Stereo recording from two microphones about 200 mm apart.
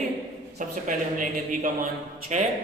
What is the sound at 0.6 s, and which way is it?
Speech, 40° right (ahead or behind).